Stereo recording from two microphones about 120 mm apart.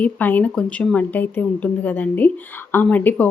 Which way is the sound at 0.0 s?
15° left (ahead or behind).